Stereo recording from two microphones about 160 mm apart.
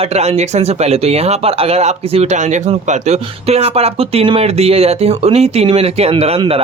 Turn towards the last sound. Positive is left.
turn(degrees=-35)  # may be behind; listen again after turning